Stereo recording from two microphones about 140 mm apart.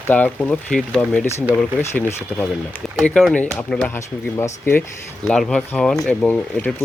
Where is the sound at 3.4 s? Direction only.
10° left (ahead or behind).